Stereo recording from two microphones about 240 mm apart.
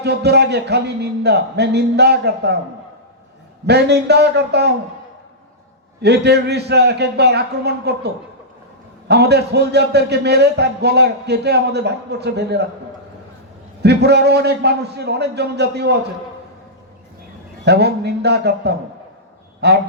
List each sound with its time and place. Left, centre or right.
0.0 s a man's voice: right
3.7 s a man's voice: right
6.0 s a man's voice: right
13.8 s a man's voice: right
17.7 s a man's voice: right